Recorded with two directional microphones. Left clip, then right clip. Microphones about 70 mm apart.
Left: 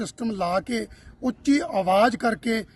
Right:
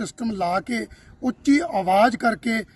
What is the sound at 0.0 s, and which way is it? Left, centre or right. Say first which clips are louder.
Speech: right 2 dB; left.